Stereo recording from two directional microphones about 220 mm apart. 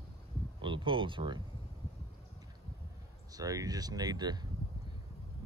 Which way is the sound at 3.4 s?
15° right (ahead or behind).